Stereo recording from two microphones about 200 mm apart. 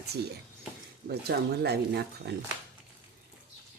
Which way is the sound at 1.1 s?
55° right (ahead or behind).